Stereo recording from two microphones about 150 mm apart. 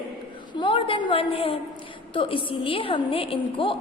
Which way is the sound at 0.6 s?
35° left (ahead or behind).